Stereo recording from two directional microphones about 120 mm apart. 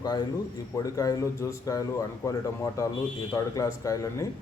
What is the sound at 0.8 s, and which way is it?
A man's voice, 30° left (ahead or behind).